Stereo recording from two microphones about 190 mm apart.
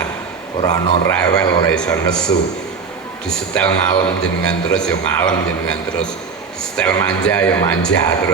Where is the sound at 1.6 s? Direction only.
5° left (ahead or behind).